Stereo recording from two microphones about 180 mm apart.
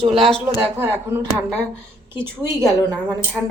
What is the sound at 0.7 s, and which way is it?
Speech, 10° right (ahead or behind).